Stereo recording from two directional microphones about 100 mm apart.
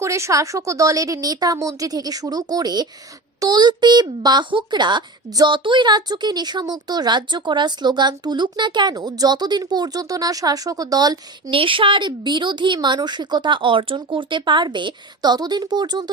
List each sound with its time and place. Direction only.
0.0 s a woman's voice: 30° right (ahead or behind)
11.5 s a woman's voice: 60° right (ahead or behind); by 16.0 s 45° right (ahead or behind)